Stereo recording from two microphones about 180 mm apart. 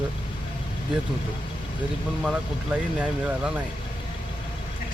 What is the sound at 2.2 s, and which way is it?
Speech, 5° right (ahead or behind).